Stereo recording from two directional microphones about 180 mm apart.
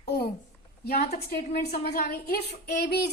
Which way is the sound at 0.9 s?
55° left (ahead or behind).